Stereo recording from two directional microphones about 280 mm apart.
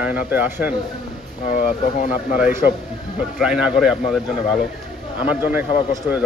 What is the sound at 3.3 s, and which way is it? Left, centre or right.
Speech, centre.